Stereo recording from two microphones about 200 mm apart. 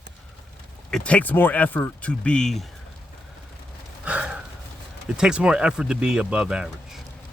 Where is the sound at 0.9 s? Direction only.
5° left (ahead or behind).